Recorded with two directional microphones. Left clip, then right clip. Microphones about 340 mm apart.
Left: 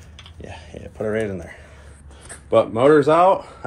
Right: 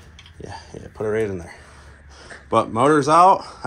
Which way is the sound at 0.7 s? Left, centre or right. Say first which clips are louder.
Right 1 dB; centre.